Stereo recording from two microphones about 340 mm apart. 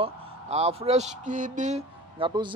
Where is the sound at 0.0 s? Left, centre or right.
Centre.